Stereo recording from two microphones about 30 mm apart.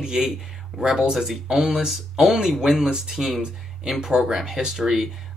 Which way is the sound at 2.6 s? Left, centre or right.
Right.